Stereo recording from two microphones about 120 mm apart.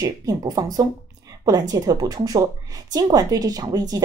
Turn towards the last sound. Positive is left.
turn(degrees=-30)  # may be behind; listen again after turning